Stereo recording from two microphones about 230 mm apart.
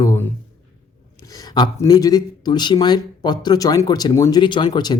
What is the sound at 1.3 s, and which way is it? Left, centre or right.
Speech, centre.